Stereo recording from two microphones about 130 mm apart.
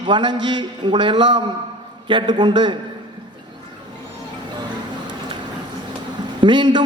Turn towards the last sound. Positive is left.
turn(degrees=-35)  # may be behind; listen again after turning